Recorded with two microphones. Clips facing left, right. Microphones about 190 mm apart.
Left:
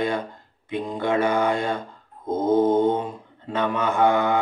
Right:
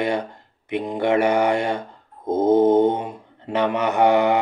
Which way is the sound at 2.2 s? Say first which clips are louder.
Right 3 dB; 55° right (ahead or behind).